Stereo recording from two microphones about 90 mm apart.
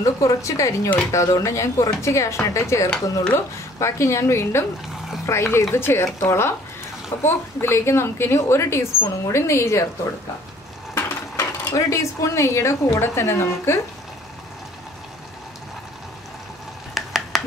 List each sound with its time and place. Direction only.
0.0 s speech: 35° left (ahead or behind)
11.0 s speech: 30° left (ahead or behind)
16.9 s a sound: centre (ahead or behind)